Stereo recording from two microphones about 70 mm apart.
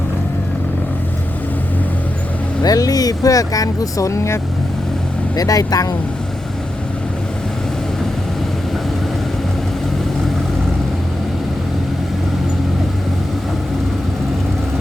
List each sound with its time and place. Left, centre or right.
2.6 s speech: left
5.4 s speech: left